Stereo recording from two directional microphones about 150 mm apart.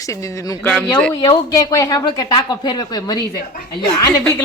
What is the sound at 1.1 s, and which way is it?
Speech, 25° left (ahead or behind).